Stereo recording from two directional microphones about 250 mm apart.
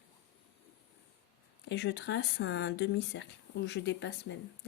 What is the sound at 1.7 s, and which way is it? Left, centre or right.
Speech, left.